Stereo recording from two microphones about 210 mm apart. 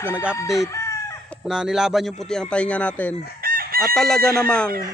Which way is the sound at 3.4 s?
45° right (ahead or behind).